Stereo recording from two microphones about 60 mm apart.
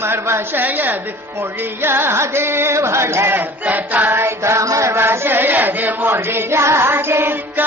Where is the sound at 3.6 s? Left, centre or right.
Right.